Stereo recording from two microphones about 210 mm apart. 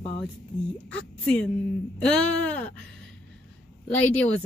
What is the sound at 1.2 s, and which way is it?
Speech, 5° left (ahead or behind).